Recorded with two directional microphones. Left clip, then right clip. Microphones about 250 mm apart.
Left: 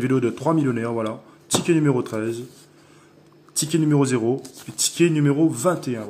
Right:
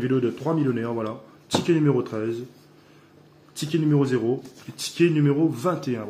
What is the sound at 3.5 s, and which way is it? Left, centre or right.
A man's voice, left.